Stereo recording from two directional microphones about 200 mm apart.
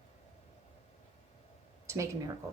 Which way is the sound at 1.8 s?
15° right (ahead or behind).